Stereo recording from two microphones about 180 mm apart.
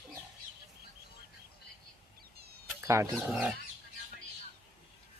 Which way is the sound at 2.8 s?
15° right (ahead or behind).